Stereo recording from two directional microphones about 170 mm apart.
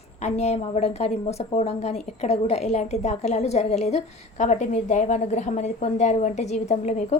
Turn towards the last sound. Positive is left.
turn(degrees=40)  # may be behind; listen again after turning